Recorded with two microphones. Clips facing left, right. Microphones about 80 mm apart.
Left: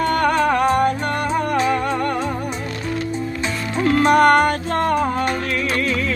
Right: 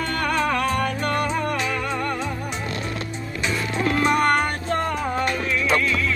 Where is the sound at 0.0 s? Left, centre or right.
Left.